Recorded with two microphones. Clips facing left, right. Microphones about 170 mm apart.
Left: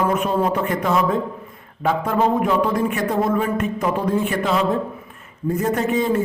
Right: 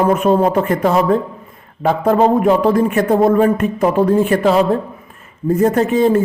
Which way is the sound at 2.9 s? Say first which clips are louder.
Right 7 dB; 50° right (ahead or behind).